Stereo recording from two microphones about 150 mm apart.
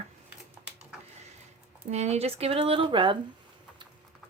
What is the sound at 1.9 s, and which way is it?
Speech, 45° right (ahead or behind).